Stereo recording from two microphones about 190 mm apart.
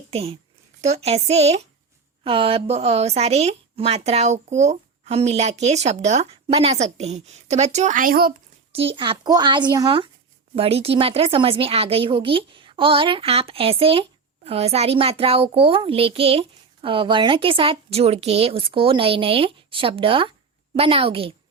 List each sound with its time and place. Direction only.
0.1 s speech: 30° right (ahead or behind); by 8.3 s 50° right (ahead or behind)
8.7 s speech: 30° right (ahead or behind)